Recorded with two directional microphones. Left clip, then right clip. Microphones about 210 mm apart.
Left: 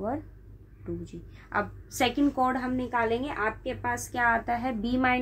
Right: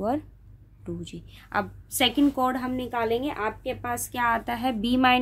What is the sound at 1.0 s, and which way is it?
A woman's voice, 40° right (ahead or behind).